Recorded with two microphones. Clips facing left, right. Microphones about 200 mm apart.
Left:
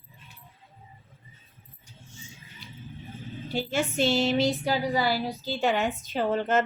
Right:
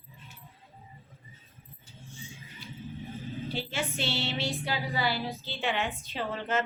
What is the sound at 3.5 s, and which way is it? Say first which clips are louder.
Music: left 8 dB; 45° left (ahead or behind).